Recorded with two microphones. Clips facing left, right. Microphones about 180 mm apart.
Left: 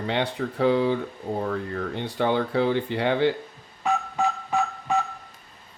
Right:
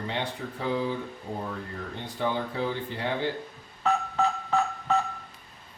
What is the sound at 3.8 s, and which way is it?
Telephone dialing, 10° left (ahead or behind).